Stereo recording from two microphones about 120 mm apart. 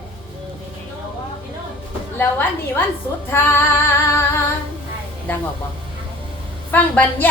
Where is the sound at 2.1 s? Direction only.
15° left (ahead or behind).